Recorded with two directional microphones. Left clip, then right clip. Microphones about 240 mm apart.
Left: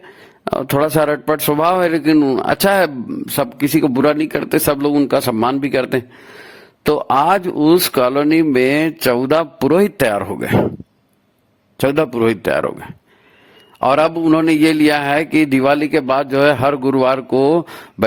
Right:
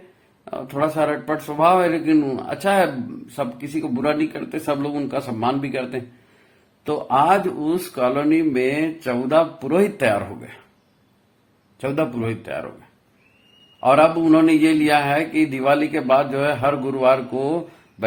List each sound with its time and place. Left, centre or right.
0.4 s a man's voice: left
11.8 s a man's voice: left
13.7 s a man's voice: left